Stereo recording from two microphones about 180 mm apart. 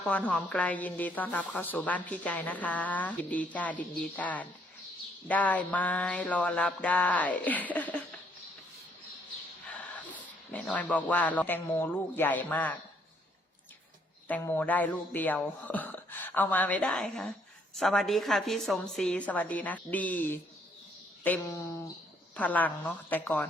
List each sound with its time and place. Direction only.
0.0 s a woman's voice: 10° left (ahead or behind)
9.7 s speech: 10° left (ahead or behind)
14.3 s a woman's voice: 10° left (ahead or behind)